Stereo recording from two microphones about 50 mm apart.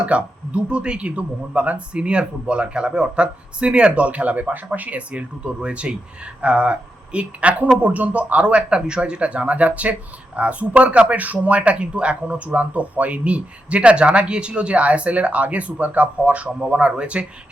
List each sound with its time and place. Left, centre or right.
0.0 s speech: right